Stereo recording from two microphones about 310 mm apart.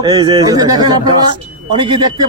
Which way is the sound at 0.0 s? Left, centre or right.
Centre.